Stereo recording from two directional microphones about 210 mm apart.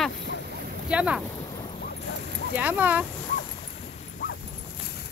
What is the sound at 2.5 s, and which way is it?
Speech, 10° right (ahead or behind).